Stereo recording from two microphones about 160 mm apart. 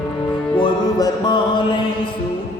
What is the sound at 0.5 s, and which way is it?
Music, 30° left (ahead or behind).